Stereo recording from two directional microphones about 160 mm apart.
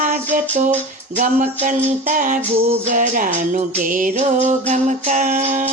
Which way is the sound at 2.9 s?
55° right (ahead or behind).